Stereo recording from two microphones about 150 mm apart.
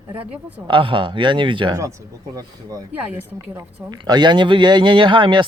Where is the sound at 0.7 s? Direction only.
35° right (ahead or behind).